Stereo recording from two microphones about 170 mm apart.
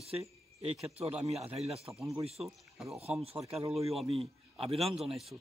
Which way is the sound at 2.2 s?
35° right (ahead or behind).